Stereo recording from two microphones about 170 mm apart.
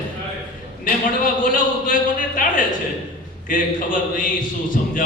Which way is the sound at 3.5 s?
50° left (ahead or behind).